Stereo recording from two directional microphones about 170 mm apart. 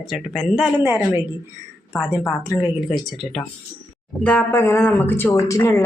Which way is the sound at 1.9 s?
10° left (ahead or behind).